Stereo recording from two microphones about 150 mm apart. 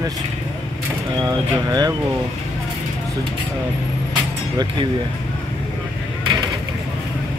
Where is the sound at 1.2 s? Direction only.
25° right (ahead or behind).